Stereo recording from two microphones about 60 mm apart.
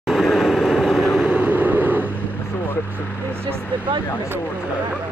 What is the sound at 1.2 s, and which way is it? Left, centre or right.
Vehicle, right.